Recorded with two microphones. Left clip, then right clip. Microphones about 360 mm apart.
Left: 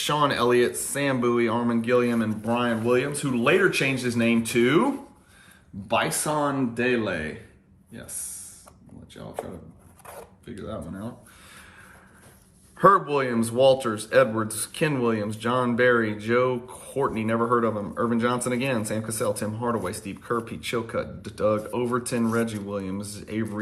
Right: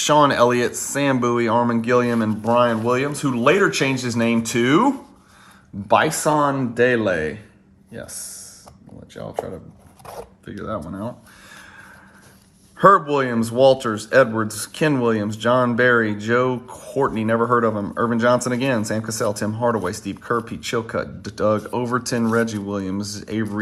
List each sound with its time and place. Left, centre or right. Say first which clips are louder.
0.0 s speech: right 8 dB; centre
5.9 s speech: right 8 dB; centre
9.2 s speech: right 9 dB; right
10.1 s zipper: right 7 dB; right
10.5 s speech: right 7 dB; centre
12.7 s speech: right 5 dB; centre